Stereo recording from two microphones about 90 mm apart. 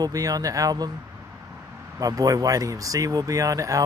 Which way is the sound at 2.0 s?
40° right (ahead or behind).